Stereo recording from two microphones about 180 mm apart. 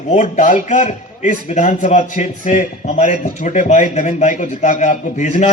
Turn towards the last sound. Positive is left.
turn(degrees=40)  # may be behind; listen again after turning